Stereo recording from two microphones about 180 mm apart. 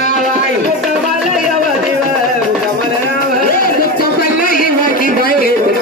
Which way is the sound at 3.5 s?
55° left (ahead or behind).